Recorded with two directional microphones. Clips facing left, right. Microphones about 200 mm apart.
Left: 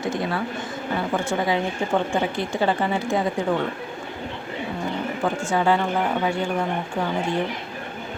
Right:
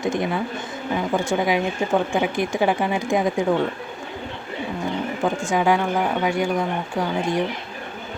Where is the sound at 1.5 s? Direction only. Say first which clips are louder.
Right 2 dB; 10° right (ahead or behind).